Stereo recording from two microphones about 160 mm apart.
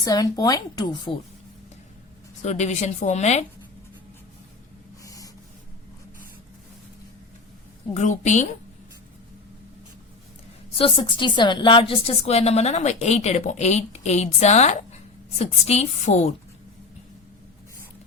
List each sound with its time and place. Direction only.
0.0 s a woman's voice: 25° left (ahead or behind)
2.4 s a woman's voice: 45° left (ahead or behind)
5.0 s snort: 20° left (ahead or behind)
7.9 s a woman's voice: 45° left (ahead or behind)
10.8 s a woman's voice: 35° left (ahead or behind)